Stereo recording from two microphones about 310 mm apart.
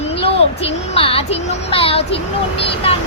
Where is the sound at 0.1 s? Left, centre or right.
Centre.